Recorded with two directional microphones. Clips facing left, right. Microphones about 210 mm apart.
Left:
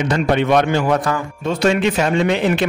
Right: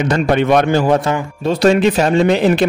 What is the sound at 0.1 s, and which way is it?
A man's voice, 45° right (ahead or behind).